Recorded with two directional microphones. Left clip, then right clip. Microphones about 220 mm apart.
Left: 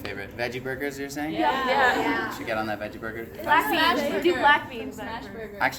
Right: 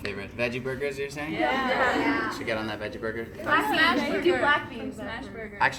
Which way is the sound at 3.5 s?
10° left (ahead or behind).